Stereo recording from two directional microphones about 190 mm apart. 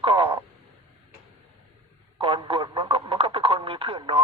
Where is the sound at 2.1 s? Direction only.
25° right (ahead or behind).